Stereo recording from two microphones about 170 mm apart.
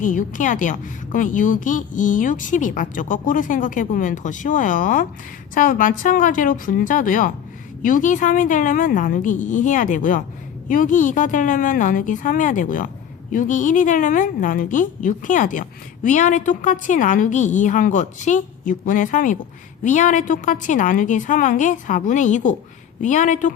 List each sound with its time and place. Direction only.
0.0 s a woman's voice: 50° left (ahead or behind)